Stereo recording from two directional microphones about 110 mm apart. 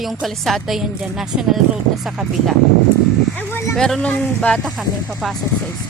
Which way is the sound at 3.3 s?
20° left (ahead or behind).